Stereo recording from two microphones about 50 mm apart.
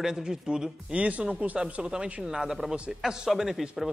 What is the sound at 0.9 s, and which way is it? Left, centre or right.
Speech, right.